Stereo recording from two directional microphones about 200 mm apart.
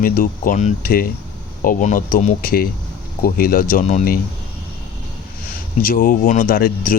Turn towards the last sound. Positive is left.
turn(degrees=45)  # may be behind; listen again after turning